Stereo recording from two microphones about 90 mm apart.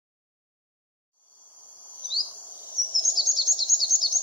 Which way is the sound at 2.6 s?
40° left (ahead or behind).